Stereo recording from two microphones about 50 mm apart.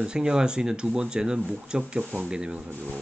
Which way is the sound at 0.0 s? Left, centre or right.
Centre.